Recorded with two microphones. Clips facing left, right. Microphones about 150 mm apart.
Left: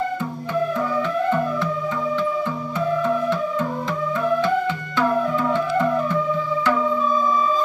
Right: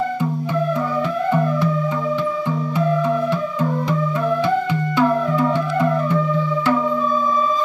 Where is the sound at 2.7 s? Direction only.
15° right (ahead or behind).